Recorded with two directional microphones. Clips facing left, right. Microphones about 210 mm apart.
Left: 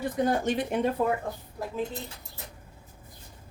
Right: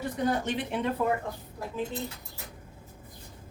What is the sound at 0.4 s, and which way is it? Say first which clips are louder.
Speech: left 4 dB; 45° left (ahead or behind).